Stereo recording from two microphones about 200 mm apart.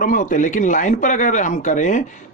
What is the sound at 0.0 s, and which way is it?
Speech, 40° left (ahead or behind).